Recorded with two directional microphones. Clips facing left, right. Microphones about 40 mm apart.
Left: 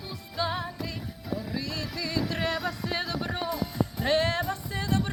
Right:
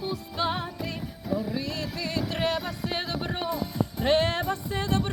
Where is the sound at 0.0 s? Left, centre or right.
Right.